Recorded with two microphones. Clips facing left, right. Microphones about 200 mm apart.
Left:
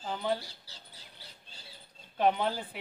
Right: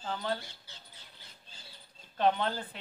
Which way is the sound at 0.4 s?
35° left (ahead or behind).